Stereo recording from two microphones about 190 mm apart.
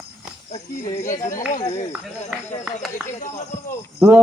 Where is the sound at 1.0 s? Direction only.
40° left (ahead or behind).